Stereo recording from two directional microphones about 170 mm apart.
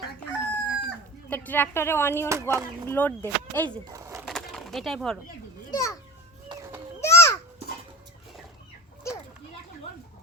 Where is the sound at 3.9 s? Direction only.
20° right (ahead or behind).